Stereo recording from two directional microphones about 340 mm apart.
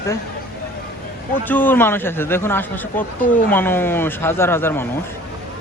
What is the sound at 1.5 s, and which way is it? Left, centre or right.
Speech, centre.